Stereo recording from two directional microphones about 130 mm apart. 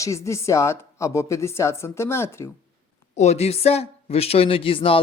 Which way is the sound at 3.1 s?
60° left (ahead or behind).